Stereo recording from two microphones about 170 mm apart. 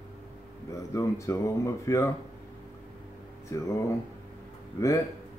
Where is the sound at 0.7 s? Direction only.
15° left (ahead or behind).